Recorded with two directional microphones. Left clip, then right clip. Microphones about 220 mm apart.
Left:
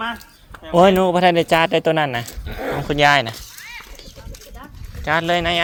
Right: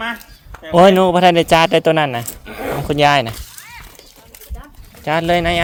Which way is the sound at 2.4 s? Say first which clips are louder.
Right 3 dB; 25° right (ahead or behind).